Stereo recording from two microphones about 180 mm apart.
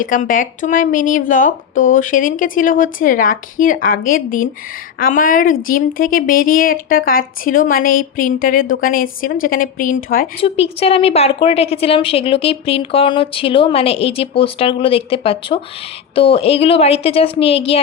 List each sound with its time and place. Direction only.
0.0 s speech: 45° left (ahead or behind)
10.4 s a woman's voice: 35° left (ahead or behind)